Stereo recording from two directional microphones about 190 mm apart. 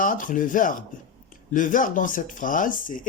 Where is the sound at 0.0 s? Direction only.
45° left (ahead or behind).